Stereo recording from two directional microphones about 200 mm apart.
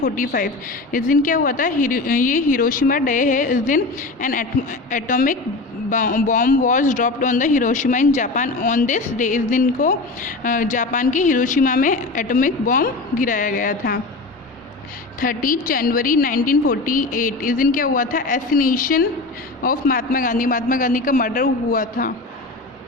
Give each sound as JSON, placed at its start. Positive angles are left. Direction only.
{"t": 0.0, "sound": "a woman's voice", "side_deg": 45}
{"t": 15.2, "sound": "a woman's voice", "side_deg": 45}